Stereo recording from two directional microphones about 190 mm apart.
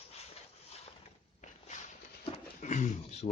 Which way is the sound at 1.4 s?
40° left (ahead or behind).